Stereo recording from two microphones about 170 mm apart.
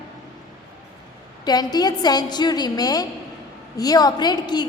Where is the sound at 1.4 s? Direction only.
25° left (ahead or behind).